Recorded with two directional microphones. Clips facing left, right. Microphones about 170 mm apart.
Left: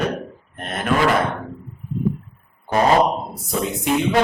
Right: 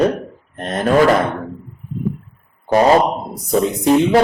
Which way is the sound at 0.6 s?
35° right (ahead or behind).